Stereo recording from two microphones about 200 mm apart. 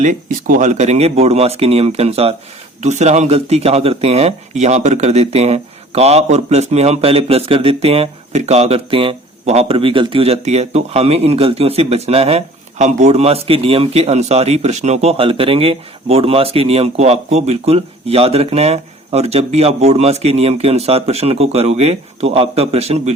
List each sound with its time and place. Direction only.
0.0 s a man's voice: 40° right (ahead or behind)